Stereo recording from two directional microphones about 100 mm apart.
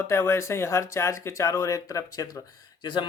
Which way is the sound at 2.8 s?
45° left (ahead or behind).